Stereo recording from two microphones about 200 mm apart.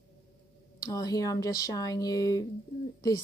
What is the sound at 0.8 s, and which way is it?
Speech, 20° left (ahead or behind).